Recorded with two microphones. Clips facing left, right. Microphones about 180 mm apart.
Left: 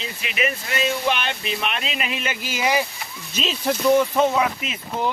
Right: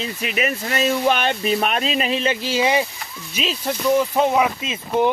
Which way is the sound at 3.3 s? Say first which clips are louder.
Left 1 dB; 5° right (ahead or behind).